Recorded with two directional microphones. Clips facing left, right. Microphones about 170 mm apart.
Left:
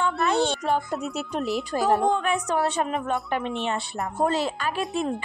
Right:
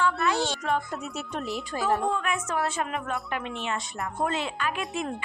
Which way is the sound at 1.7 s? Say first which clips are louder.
Left 4 dB; 35° left (ahead or behind).